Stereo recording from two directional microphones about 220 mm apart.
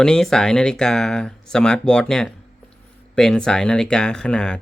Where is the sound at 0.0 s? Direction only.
5° left (ahead or behind).